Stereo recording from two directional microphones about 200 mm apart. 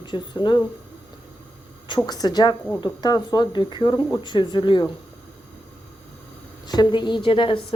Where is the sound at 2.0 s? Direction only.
20° left (ahead or behind).